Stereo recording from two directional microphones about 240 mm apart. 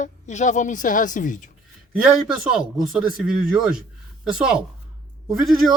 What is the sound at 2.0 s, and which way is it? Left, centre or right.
Speech, centre.